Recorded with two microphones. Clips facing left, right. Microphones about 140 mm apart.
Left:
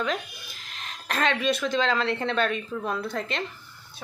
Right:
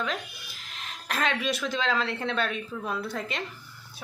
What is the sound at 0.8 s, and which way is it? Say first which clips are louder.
A woman's voice: left 2 dB; 5° right (ahead or behind).